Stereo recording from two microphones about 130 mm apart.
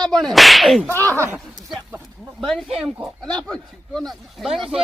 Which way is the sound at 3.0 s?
5° left (ahead or behind).